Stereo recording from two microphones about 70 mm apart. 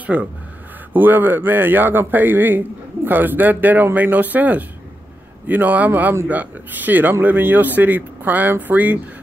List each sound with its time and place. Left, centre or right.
0.0 s speech: right